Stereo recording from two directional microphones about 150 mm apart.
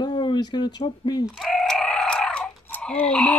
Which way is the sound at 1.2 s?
Centre (ahead or behind).